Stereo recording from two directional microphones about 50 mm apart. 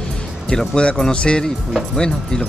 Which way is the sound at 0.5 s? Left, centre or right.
Centre.